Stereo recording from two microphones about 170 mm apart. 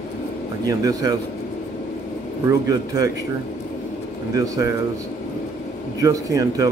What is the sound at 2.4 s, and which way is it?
Speech, 20° right (ahead or behind).